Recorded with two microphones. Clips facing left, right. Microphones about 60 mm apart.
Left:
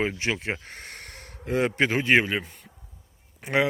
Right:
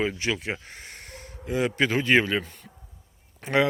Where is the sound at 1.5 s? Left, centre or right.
Left.